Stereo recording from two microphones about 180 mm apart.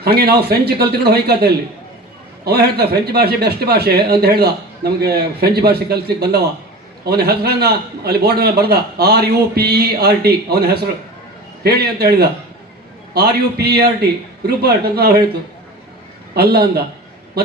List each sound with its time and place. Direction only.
0.0 s a man's voice: 60° right (ahead or behind)
16.3 s a man's voice: 60° right (ahead or behind)